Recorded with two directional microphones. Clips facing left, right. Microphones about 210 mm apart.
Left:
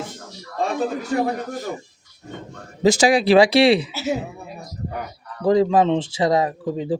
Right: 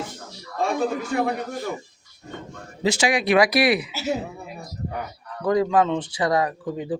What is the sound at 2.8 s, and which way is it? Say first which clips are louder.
Speech: left 6 dB; 40° left (ahead or behind).